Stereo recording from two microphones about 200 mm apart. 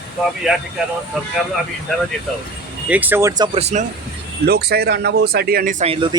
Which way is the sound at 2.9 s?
10° right (ahead or behind).